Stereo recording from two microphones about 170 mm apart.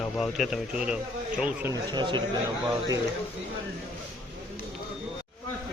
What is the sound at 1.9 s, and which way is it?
Speech, 25° right (ahead or behind).